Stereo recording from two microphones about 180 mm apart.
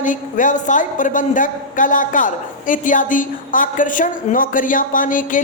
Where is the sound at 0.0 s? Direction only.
45° left (ahead or behind).